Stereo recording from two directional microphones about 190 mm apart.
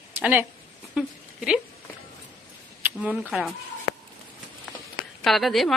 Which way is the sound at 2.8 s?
5° right (ahead or behind).